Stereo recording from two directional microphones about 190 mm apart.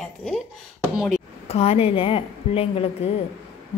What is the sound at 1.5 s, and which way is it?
A woman's voice, 30° left (ahead or behind).